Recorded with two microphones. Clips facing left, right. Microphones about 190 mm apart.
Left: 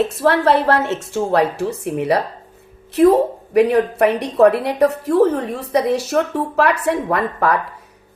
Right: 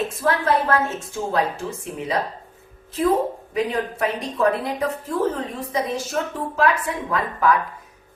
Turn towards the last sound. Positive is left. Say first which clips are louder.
# left 3 dB
turn(degrees=70)  # may be behind; listen again after turning